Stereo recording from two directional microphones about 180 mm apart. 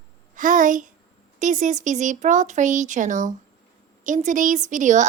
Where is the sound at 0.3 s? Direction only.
45° right (ahead or behind).